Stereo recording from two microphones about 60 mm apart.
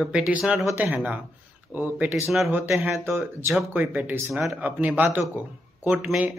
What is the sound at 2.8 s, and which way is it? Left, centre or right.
Speech, right.